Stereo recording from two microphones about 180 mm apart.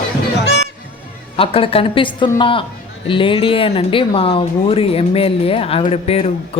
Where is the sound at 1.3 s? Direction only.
30° left (ahead or behind).